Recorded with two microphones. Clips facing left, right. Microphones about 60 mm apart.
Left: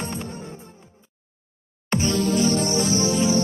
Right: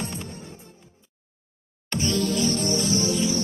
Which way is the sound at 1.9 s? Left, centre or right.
Left.